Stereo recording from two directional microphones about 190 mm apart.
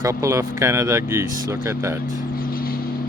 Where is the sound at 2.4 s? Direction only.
50° left (ahead or behind).